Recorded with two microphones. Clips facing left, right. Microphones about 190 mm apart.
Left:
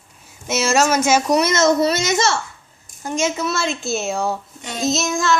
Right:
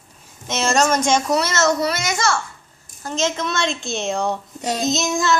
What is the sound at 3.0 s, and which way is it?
Speech, 10° left (ahead or behind).